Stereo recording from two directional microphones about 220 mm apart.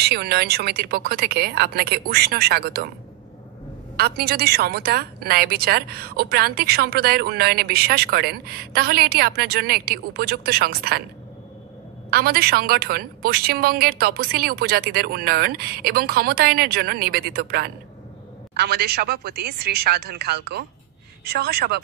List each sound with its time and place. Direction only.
0.0 s a woman's voice: 45° right (ahead or behind)
3.9 s a woman's voice: 45° right (ahead or behind)
12.1 s a woman's voice: 45° right (ahead or behind)